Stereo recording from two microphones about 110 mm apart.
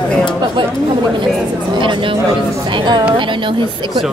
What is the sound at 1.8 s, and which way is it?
Speech, 50° right (ahead or behind).